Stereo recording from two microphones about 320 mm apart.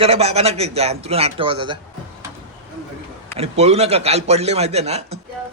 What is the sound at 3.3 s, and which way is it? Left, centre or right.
A man's voice, centre.